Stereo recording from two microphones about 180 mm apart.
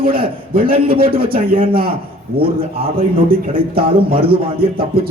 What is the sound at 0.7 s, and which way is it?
Speech, 30° right (ahead or behind).